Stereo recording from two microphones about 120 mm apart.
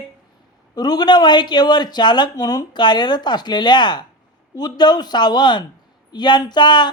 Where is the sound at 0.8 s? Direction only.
35° left (ahead or behind).